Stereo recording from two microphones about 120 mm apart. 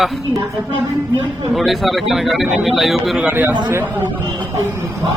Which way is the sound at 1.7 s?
Centre (ahead or behind).